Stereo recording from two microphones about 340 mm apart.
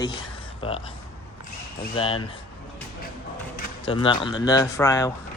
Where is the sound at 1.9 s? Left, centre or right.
Centre.